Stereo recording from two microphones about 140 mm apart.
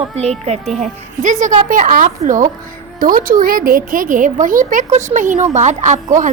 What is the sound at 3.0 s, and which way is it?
Speech, 80° right.